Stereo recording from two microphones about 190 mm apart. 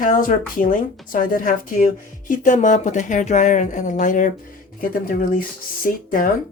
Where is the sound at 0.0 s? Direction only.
45° left (ahead or behind).